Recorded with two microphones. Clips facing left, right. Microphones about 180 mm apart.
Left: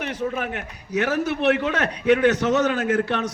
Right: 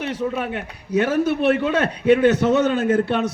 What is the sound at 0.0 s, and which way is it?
A man's voice, 30° right (ahead or behind).